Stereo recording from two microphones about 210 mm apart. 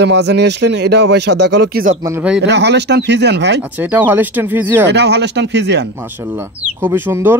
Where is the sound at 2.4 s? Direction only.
55° right (ahead or behind).